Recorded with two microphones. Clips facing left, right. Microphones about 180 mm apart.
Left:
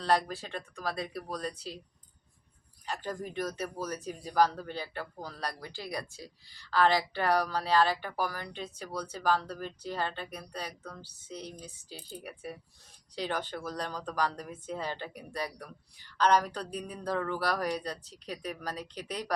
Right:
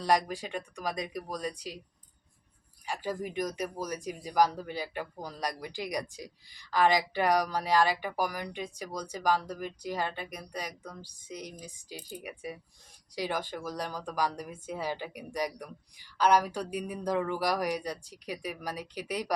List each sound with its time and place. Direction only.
0.0 s speech: 15° right (ahead or behind)
2.8 s speech: 10° right (ahead or behind)